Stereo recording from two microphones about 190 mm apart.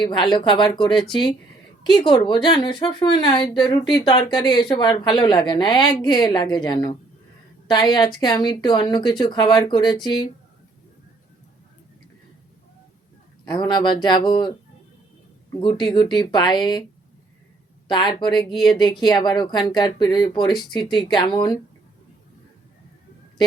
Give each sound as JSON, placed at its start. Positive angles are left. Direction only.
{"t": 0.0, "sound": "speech", "side_deg": 25}
{"t": 13.4, "sound": "speech", "side_deg": 25}
{"t": 15.6, "sound": "speech", "side_deg": 25}
{"t": 17.8, "sound": "speech", "side_deg": 25}